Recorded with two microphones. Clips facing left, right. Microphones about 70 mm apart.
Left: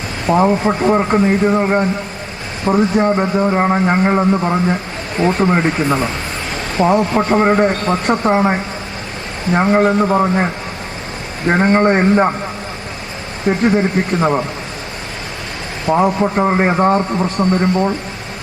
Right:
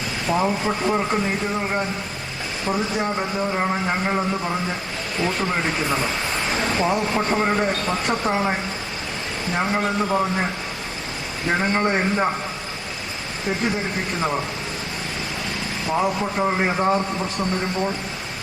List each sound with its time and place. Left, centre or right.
0.3 s speech: left
13.4 s speech: left
15.9 s speech: left